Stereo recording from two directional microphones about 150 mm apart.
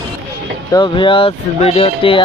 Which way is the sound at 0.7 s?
30° left (ahead or behind).